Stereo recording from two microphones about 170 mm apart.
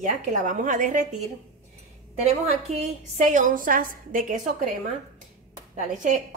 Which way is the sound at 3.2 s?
50° right (ahead or behind).